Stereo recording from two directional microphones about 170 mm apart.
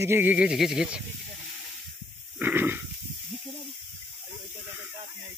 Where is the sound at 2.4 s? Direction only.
10° right (ahead or behind).